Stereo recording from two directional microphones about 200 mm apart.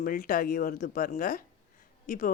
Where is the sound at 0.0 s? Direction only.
45° left (ahead or behind).